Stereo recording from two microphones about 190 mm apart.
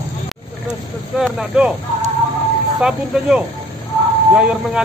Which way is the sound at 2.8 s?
5° right (ahead or behind).